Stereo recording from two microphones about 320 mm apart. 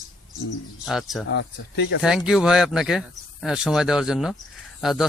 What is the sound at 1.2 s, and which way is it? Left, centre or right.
Speech, left.